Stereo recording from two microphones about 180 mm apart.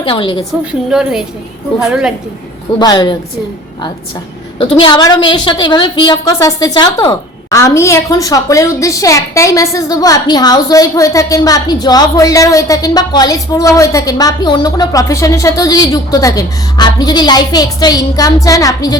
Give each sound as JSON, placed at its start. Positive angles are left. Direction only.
{"t": 0.0, "sound": "a woman's voice", "side_deg": 30}
{"t": 0.6, "sound": "a woman's voice", "side_deg": -5}
{"t": 2.7, "sound": "a woman's voice", "side_deg": 25}
{"t": 4.8, "sound": "a woman's voice", "side_deg": 25}